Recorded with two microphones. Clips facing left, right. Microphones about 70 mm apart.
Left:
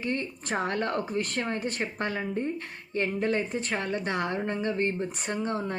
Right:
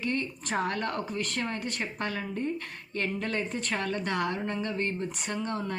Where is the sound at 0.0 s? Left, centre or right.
Left.